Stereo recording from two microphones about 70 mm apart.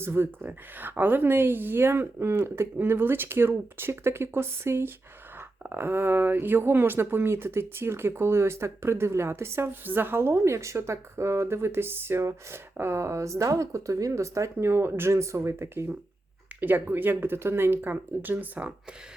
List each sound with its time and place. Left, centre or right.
0.0 s speech: right
16.6 s speech: right